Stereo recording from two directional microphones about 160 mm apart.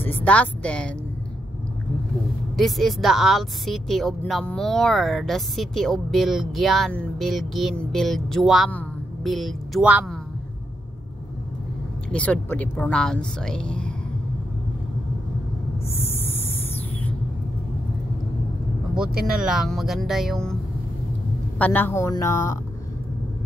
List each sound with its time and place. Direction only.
0.0 s speech: 10° left (ahead or behind)
2.5 s a woman's voice: centre (ahead or behind)
12.1 s speech: 10° left (ahead or behind)
16.0 s a sound: 15° left (ahead or behind)
19.3 s a woman's voice: 5° right (ahead or behind)
21.5 s speech: 10° left (ahead or behind)